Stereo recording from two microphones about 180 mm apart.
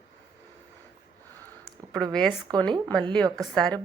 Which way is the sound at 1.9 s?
5° left (ahead or behind).